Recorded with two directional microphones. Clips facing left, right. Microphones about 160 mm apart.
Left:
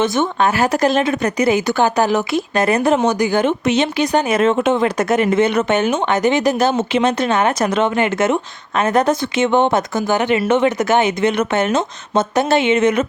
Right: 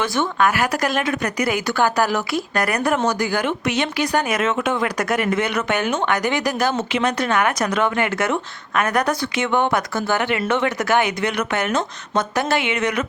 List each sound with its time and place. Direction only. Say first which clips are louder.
0.0 s speech: left 3 dB; 20° left (ahead or behind)